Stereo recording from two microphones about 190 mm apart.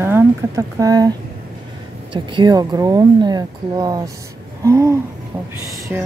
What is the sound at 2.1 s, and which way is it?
A woman's voice, 25° right (ahead or behind).